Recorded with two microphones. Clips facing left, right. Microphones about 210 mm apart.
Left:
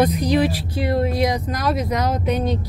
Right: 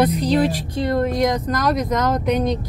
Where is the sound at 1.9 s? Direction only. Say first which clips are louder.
Right 2 dB; 45° right (ahead or behind).